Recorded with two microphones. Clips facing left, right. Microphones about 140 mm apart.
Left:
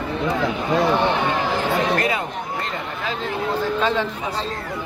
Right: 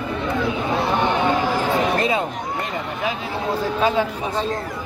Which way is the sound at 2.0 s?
20° right (ahead or behind).